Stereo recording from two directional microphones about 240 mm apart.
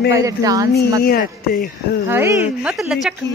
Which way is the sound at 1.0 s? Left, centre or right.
Left.